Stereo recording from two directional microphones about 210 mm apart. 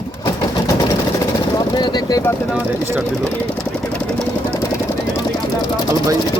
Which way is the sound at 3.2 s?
5° left (ahead or behind).